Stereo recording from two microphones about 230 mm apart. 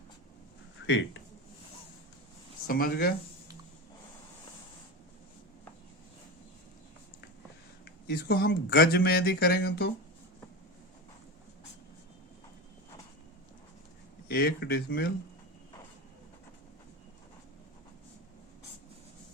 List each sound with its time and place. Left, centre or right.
2.6 s speech: left
7.9 s speech: left
14.3 s speech: left